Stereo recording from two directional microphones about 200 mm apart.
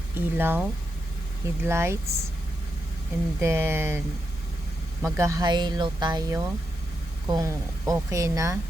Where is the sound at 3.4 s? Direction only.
15° right (ahead or behind).